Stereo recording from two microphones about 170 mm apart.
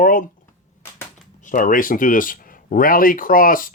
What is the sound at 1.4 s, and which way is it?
Speech, 50° left (ahead or behind).